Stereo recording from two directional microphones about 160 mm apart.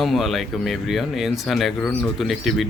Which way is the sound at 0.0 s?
Centre (ahead or behind).